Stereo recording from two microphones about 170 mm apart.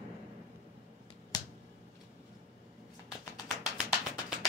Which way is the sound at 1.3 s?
20° left (ahead or behind).